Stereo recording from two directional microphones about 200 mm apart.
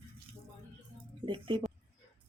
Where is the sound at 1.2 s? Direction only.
25° right (ahead or behind).